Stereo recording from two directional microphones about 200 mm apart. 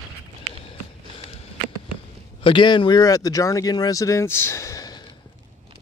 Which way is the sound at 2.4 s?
25° left (ahead or behind).